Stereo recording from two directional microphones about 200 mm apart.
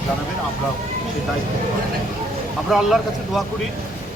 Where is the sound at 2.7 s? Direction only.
Centre (ahead or behind).